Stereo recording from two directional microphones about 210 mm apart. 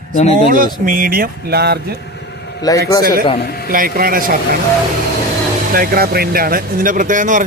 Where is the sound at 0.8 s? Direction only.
45° right (ahead or behind).